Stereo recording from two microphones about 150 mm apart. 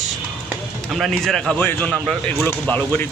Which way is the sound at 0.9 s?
Centre (ahead or behind).